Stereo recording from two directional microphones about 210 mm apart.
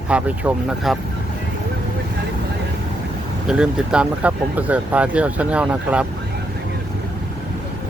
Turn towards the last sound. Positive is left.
turn(degrees=-5)  # may be behind; listen again after turning